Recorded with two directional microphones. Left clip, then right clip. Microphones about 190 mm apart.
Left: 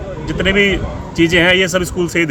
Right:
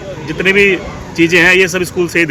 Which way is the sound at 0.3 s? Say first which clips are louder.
Right 4 dB; 20° left (ahead or behind).